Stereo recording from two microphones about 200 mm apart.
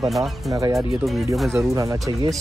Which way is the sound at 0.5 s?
20° right (ahead or behind).